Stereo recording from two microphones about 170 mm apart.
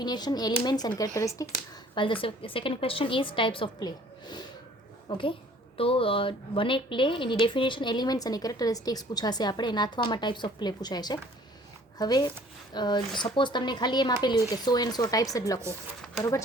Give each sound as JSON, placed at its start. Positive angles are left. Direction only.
{"t": 0.0, "sound": "speech", "side_deg": 25}
{"t": 2.0, "sound": "a woman's voice", "side_deg": 30}